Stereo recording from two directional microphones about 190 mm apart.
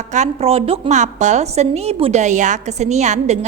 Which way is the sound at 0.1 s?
35° right (ahead or behind).